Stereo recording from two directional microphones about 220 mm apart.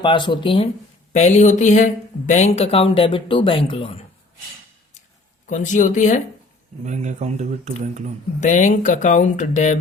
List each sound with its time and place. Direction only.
0.0 s speech: 20° left (ahead or behind)
5.5 s speech: 35° left (ahead or behind)
6.8 s speech: 35° right (ahead or behind)
8.4 s speech: 35° left (ahead or behind)